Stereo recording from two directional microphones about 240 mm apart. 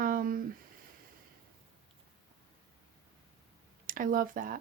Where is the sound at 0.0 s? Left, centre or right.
Right.